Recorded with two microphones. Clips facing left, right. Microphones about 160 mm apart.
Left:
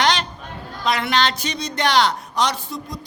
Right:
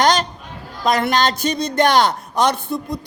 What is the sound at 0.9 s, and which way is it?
Speech, 45° right (ahead or behind).